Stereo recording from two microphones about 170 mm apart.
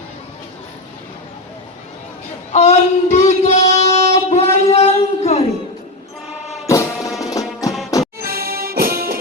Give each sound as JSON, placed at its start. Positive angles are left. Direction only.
{"t": 2.5, "sound": "a sound", "side_deg": 40}
{"t": 6.7, "sound": "music", "side_deg": 20}
{"t": 8.2, "sound": "music", "side_deg": -60}